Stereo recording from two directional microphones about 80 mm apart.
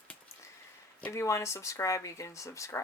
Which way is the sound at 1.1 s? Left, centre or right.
Left.